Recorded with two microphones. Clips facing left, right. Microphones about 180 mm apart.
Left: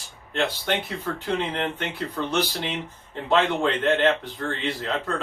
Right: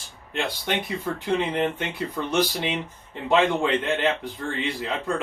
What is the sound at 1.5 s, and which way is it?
Speech, 15° right (ahead or behind).